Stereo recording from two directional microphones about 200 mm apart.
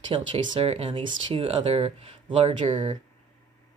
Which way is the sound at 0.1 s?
25° right (ahead or behind).